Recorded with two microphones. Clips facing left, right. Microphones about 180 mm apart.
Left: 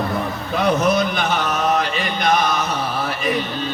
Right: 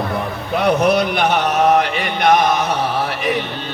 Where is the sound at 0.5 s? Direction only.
65° right (ahead or behind).